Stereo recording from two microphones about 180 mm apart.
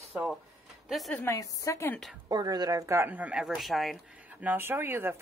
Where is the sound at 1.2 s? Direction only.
15° left (ahead or behind).